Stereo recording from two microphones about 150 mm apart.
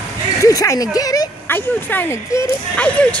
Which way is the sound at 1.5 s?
15° left (ahead or behind).